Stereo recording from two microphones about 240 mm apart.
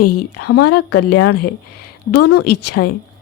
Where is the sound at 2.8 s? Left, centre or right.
Left.